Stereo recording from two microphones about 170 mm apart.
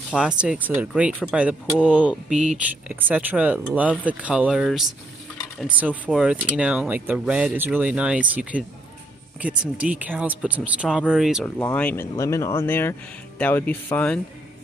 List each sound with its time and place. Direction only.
0.1 s speech: 5° right (ahead or behind)
11.4 s speech: 10° left (ahead or behind)